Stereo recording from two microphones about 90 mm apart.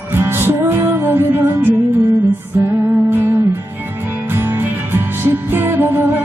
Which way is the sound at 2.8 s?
30° right (ahead or behind).